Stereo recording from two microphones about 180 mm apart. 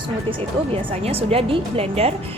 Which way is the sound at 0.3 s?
30° right (ahead or behind).